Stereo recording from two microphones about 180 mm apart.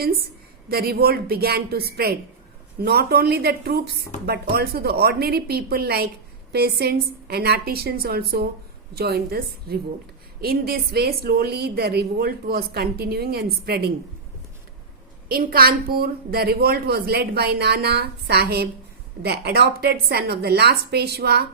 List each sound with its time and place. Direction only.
0.7 s a woman's voice: 60° right (ahead or behind)
15.3 s a woman's voice: 55° right (ahead or behind)